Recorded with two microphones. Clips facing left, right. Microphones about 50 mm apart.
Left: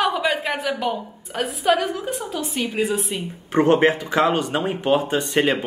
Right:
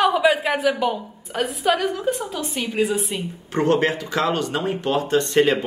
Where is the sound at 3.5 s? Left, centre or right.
Left.